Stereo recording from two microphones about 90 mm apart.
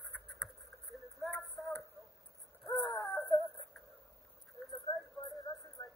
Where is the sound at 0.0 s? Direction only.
Centre (ahead or behind).